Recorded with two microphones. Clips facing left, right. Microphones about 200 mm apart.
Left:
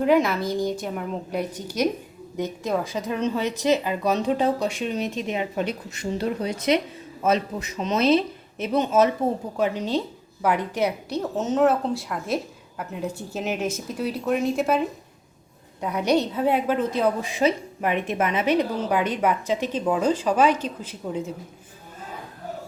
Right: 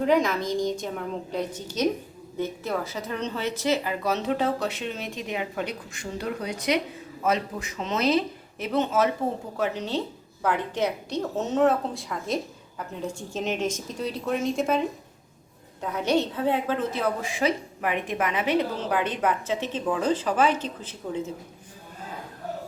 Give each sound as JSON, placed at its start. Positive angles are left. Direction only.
{"t": 0.0, "sound": "a woman's voice", "side_deg": 5}
{"t": 11.3, "sound": "a woman's voice", "side_deg": 0}
{"t": 15.8, "sound": "a woman's voice", "side_deg": 15}